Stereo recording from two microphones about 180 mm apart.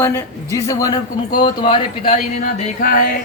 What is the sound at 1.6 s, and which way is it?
Music, 30° left (ahead or behind).